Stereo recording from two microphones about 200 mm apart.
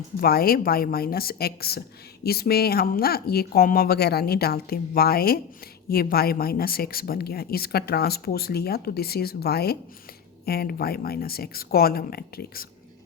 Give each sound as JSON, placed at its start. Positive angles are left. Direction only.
{"t": 0.2, "sound": "speech", "side_deg": 50}